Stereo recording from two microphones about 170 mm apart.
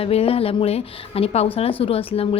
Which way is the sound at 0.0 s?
35° left (ahead or behind).